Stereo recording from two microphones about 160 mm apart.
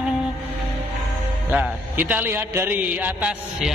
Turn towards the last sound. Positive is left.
turn(degrees=-5)  # may be behind; listen again after turning